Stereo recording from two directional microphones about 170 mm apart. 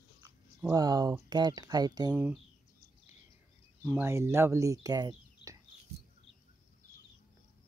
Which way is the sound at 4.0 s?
15° right (ahead or behind).